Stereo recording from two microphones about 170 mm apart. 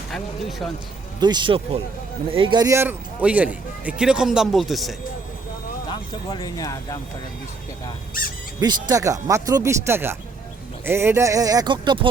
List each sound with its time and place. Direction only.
0.1 s speech: centre (ahead or behind)
1.2 s a man's voice: 25° right (ahead or behind); by 4.9 s centre (ahead or behind)
5.9 s speech: 25° left (ahead or behind)
8.6 s speech: 20° right (ahead or behind)